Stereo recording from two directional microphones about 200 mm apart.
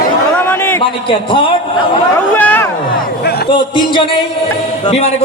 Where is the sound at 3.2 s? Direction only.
55° left (ahead or behind).